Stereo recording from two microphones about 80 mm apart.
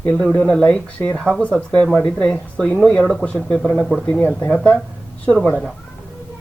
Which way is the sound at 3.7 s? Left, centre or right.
Centre.